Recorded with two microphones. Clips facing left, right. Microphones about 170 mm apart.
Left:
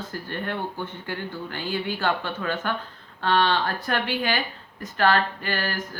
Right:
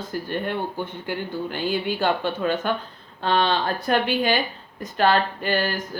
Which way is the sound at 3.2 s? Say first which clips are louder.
Right 1 dB; 20° right (ahead or behind).